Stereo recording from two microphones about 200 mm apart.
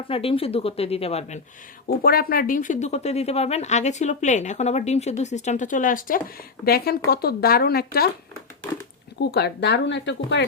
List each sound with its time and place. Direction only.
0.1 s speech: 30° left (ahead or behind)
2.0 s speech: 50° left (ahead or behind)
9.2 s speech: 55° left (ahead or behind)